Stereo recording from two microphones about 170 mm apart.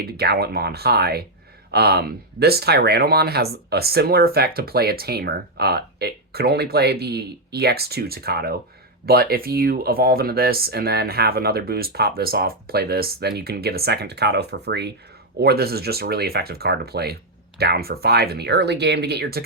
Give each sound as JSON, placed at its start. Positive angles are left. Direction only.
{"t": 0.0, "sound": "speech", "side_deg": -70}
{"t": 15.4, "sound": "speech", "side_deg": -70}